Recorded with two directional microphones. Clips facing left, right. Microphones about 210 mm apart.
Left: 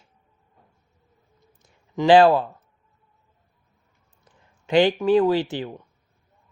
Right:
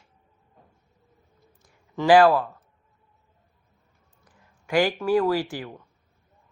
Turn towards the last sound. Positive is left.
turn(degrees=25)  # may be behind; listen again after turning